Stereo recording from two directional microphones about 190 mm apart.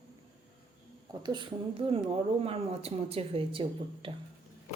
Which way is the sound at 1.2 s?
25° right (ahead or behind).